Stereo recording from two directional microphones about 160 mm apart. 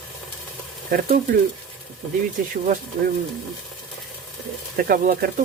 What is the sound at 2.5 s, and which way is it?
Speech, 55° right (ahead or behind).